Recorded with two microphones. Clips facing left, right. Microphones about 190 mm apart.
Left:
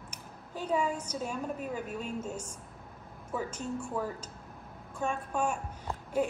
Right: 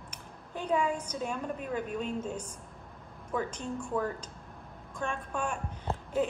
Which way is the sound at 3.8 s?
10° left (ahead or behind).